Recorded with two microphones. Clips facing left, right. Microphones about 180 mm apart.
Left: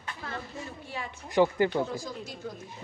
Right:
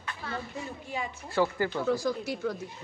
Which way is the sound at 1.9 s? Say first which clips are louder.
Right 8 dB; 75° right (ahead or behind).